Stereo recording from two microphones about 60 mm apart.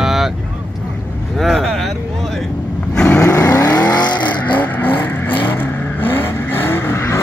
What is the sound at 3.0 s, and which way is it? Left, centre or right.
Vehicle, left.